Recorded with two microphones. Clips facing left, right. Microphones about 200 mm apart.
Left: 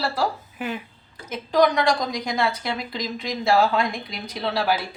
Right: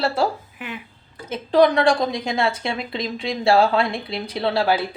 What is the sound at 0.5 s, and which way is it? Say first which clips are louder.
Speech: left 4 dB; 40° left (ahead or behind).